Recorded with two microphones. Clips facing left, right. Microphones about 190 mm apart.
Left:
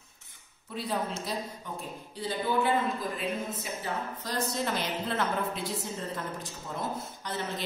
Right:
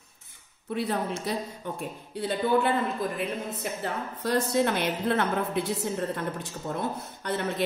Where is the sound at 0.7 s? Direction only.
65° right (ahead or behind).